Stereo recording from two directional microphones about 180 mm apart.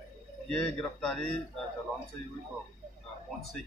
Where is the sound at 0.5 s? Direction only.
5° left (ahead or behind).